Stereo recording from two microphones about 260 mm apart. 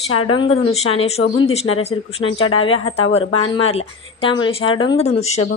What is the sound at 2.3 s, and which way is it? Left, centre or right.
Speech, left.